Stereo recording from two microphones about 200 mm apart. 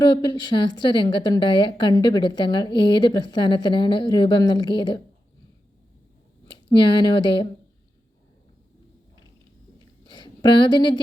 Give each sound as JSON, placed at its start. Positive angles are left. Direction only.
{"t": 0.0, "sound": "a woman's voice", "side_deg": 20}
{"t": 6.5, "sound": "speech", "side_deg": 20}
{"t": 9.7, "sound": "chewing", "side_deg": 20}